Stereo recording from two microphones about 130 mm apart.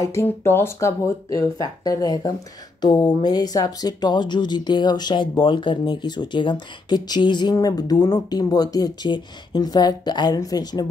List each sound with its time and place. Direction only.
0.0 s speech: 20° left (ahead or behind)